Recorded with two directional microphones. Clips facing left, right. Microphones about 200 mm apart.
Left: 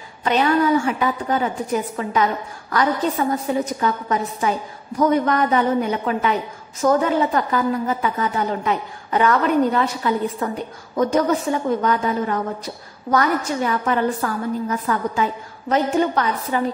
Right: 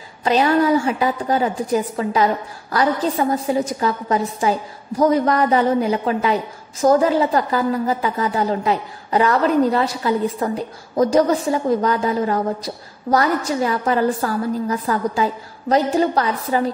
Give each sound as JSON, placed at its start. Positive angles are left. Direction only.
{"t": 0.2, "sound": "a woman's voice", "side_deg": -30}